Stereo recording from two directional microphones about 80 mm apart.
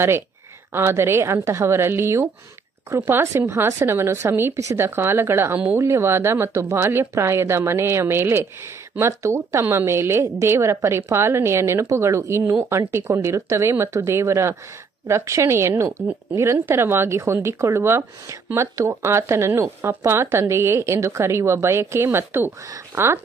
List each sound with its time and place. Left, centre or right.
0.7 s a woman's voice: right